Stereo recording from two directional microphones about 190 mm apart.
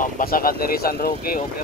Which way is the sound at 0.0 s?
50° left (ahead or behind).